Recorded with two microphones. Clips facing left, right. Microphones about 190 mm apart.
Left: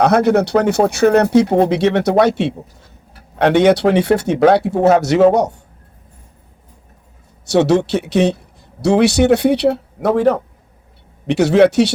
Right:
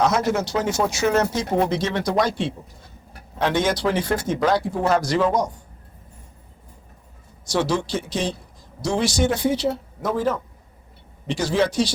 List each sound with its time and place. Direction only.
0.0 s speech: 60° left (ahead or behind)
7.4 s speech: 65° left (ahead or behind)